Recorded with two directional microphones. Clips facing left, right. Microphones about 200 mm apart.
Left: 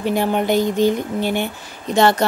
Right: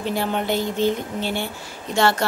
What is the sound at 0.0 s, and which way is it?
A woman's voice, 15° left (ahead or behind).